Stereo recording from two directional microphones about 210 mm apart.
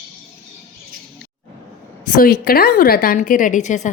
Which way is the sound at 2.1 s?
45° left (ahead or behind).